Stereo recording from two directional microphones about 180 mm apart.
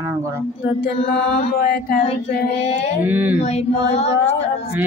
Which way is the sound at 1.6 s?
55° left (ahead or behind).